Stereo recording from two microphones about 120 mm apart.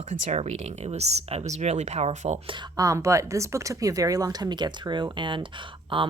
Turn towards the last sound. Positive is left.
turn(degrees=-45)  # may be behind; listen again after turning